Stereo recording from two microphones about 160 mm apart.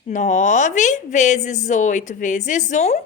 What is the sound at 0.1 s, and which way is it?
A woman's voice, 50° left (ahead or behind).